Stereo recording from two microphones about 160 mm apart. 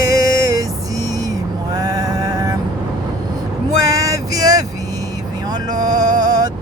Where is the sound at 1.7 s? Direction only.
25° right (ahead or behind).